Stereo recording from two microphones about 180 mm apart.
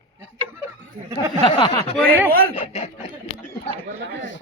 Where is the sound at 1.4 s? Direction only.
25° left (ahead or behind).